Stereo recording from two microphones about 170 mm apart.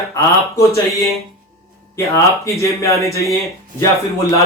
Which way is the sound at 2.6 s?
20° left (ahead or behind).